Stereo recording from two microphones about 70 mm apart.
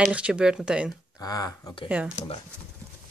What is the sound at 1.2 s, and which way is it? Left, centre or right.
Speech, left.